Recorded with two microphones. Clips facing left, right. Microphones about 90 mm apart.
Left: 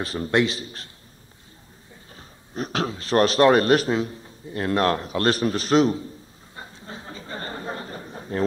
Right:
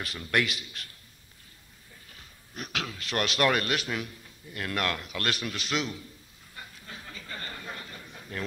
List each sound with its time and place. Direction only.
0.0 s speech: 35° left (ahead or behind)
2.1 s speech: 35° left (ahead or behind)
6.5 s a sound: 30° left (ahead or behind)